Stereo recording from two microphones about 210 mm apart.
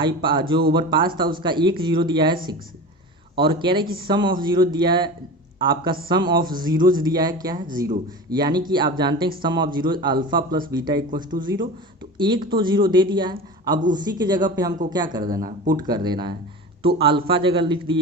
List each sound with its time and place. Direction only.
0.0 s speech: 25° right (ahead or behind)
11.2 s speech: 40° right (ahead or behind)
12.1 s speech: 20° right (ahead or behind)